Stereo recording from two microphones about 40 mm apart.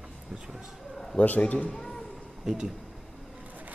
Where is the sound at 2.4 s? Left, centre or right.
Centre.